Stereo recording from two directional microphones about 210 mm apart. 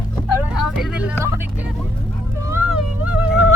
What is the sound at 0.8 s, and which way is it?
Vehicle, 5° right (ahead or behind).